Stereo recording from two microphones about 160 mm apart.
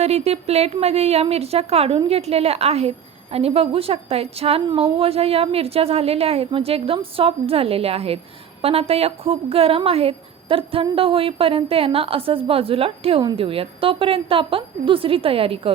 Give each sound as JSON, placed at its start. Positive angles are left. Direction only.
{"t": 0.0, "sound": "a woman's voice", "side_deg": -40}